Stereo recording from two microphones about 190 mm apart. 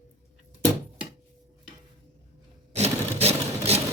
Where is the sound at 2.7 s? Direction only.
35° right (ahead or behind).